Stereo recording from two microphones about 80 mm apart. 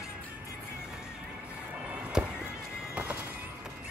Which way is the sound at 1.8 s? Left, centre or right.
Centre.